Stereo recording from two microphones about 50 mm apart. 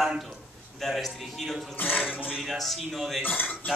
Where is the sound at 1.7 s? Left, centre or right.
Left.